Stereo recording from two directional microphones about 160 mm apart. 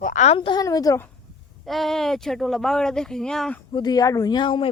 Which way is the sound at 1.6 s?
Centre (ahead or behind).